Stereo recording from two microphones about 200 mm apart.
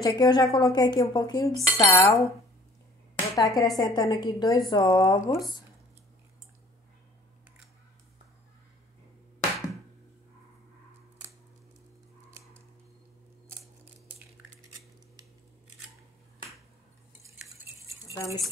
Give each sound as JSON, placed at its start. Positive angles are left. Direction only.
{"t": 0.0, "sound": "dishes", "side_deg": 20}
{"t": 3.3, "sound": "speech", "side_deg": 15}
{"t": 3.7, "sound": "dishes", "side_deg": 20}
{"t": 12.3, "sound": "a sound", "side_deg": -15}
{"t": 18.0, "sound": "cutlery", "side_deg": 15}